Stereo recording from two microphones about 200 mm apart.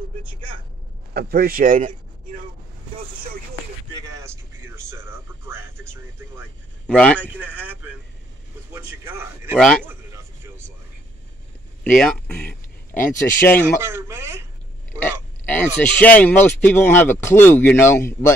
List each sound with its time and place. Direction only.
1.1 s speech: 50° right (ahead or behind)
4.2 s speech: 15° right (ahead or behind)
6.9 s a man's voice: 5° left (ahead or behind)
7.2 s speech: 10° right (ahead or behind)
9.6 s a man's voice: 5° left (ahead or behind)
9.8 s a sound: 10° right (ahead or behind)
11.8 s speech: 5° left (ahead or behind)
13.7 s speech: 15° right (ahead or behind)
15.4 s speech: 10° left (ahead or behind)